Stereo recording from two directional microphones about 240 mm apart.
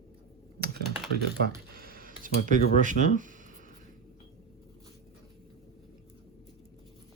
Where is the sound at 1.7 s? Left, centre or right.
Right.